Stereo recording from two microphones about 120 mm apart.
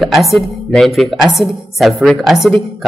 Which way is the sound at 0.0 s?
Centre (ahead or behind).